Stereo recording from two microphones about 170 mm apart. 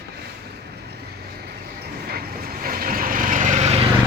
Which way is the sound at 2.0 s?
60° right (ahead or behind).